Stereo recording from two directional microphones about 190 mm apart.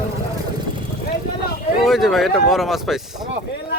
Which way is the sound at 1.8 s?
Centre (ahead or behind).